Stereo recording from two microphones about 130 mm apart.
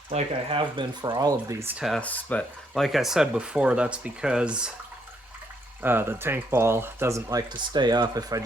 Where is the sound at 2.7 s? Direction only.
Centre (ahead or behind).